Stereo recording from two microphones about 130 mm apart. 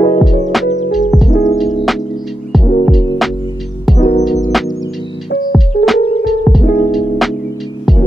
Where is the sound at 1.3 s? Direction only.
85° left.